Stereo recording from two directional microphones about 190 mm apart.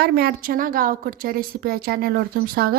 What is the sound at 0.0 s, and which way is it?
A woman's voice, 55° right (ahead or behind).